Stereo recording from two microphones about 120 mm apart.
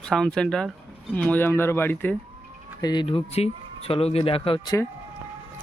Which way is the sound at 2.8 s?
40° left (ahead or behind).